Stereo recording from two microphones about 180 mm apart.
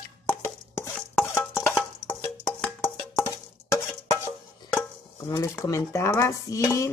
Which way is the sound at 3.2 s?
15° left (ahead or behind).